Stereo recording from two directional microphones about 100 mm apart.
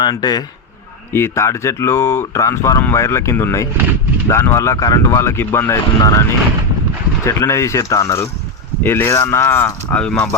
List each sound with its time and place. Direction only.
0.0 s a man's voice: 45° left (ahead or behind)
1.1 s speech: 25° left (ahead or behind)
7.3 s speech: 30° left (ahead or behind)
9.9 s speech: 10° left (ahead or behind)